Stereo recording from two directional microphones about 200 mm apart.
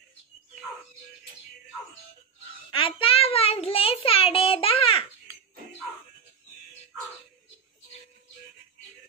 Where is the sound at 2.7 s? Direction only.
25° left (ahead or behind).